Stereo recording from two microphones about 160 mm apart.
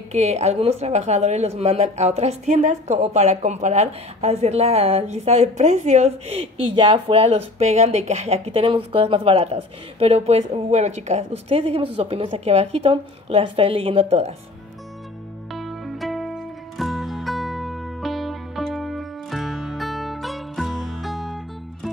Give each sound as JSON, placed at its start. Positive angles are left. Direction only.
{"t": 0.1, "sound": "a woman's voice", "side_deg": -45}
{"t": 15.5, "sound": "music", "side_deg": 0}